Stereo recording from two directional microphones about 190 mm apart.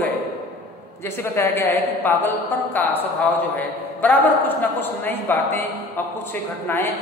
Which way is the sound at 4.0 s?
10° left (ahead or behind).